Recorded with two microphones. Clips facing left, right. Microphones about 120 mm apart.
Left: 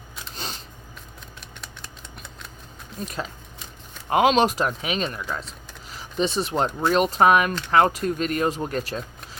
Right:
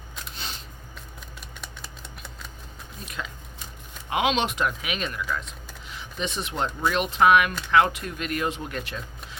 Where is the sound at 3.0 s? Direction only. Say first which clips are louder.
Left 5 dB; 35° left (ahead or behind).